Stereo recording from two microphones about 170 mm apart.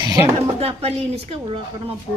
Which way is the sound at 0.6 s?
35° right (ahead or behind).